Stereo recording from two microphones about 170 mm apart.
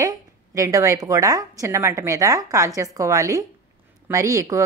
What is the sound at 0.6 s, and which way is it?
A woman's voice, 20° right (ahead or behind).